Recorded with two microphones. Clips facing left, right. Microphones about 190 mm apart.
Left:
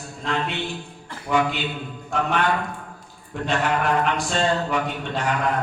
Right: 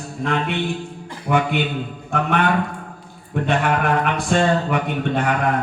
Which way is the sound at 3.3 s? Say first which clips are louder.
Right 3 dB; 55° right (ahead or behind).